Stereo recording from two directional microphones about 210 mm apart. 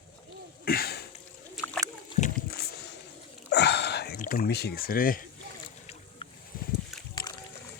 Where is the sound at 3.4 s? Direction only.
50° left (ahead or behind).